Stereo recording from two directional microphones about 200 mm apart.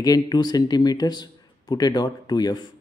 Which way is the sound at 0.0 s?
20° left (ahead or behind).